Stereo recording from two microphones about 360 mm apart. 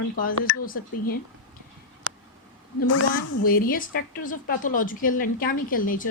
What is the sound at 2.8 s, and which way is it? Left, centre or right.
Speech, left.